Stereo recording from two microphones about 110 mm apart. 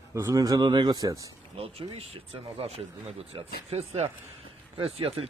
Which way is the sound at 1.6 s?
60° right (ahead or behind).